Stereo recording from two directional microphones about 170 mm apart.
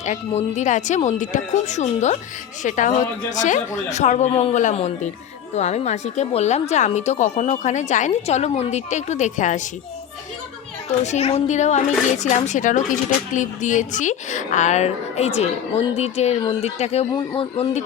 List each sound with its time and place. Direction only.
0.0 s a woman's voice: 40° left (ahead or behind)
11.0 s a woman's voice: 40° left (ahead or behind)